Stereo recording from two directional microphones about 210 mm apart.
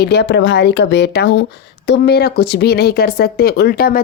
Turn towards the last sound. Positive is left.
turn(degrees=45)  # may be behind; listen again after turning